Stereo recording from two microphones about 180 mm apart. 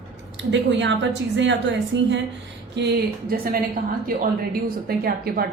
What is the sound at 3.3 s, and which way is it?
A woman's voice, 55° right (ahead or behind).